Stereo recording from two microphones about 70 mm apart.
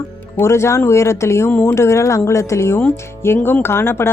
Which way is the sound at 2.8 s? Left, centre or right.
Left.